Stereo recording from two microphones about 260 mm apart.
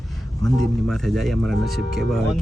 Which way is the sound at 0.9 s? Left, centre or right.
Centre.